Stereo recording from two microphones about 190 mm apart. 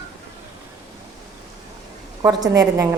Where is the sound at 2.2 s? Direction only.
20° right (ahead or behind).